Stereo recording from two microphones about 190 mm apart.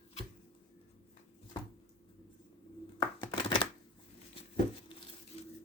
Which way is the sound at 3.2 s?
25° left (ahead or behind).